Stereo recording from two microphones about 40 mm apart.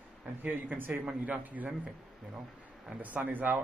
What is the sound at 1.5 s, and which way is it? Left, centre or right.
Speech, right.